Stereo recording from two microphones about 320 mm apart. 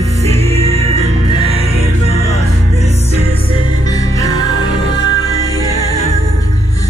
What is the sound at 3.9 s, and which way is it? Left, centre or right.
Music, centre.